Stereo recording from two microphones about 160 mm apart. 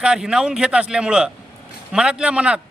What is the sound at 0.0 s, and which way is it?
A man's voice, 5° right (ahead or behind).